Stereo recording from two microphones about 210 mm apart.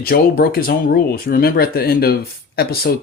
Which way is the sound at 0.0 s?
45° left (ahead or behind).